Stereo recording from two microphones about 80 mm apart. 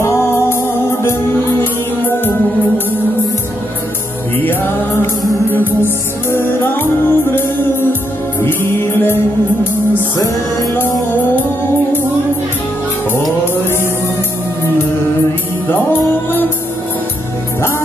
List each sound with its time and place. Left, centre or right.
0.0 s music: left
4.5 s music: left
10.2 s music: left
10.7 s music: left
15.7 s music: left